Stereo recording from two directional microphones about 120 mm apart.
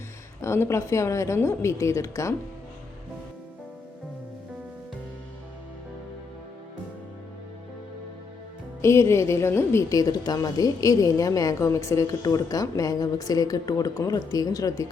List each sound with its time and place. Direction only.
0.4 s a woman's voice: 20° left (ahead or behind)
8.8 s a woman's voice: 25° left (ahead or behind)